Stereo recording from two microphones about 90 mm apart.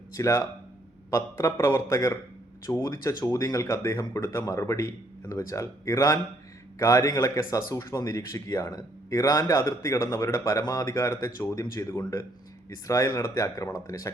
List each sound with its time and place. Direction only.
0.1 s speech: 35° left (ahead or behind)